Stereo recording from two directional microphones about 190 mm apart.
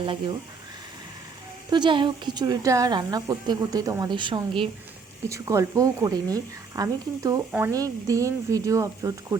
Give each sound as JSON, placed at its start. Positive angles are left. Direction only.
{"t": 0.0, "sound": "a woman's voice", "side_deg": -25}
{"t": 1.7, "sound": "a woman's voice", "side_deg": -25}
{"t": 5.3, "sound": "speech", "side_deg": -15}